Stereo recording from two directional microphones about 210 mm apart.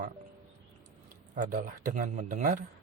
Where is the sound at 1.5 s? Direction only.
35° right (ahead or behind).